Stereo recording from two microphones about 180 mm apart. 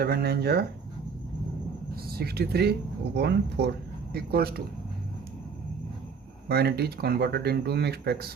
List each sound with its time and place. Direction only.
0.0 s speech: 60° right (ahead or behind)
2.0 s speech: 60° right (ahead or behind)
6.5 s speech: 60° right (ahead or behind)